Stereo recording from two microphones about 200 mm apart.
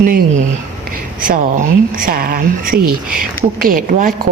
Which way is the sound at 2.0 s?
45° right (ahead or behind).